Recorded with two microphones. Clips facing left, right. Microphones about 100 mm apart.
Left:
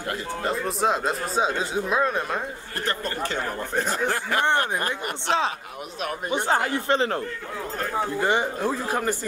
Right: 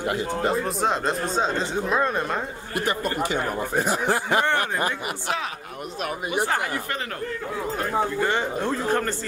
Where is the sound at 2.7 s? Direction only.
10° right (ahead or behind).